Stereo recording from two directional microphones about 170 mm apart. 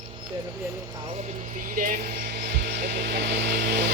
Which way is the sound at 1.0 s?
40° right (ahead or behind).